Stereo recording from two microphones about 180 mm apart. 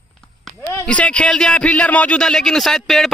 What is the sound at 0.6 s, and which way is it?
Speech, 15° left (ahead or behind).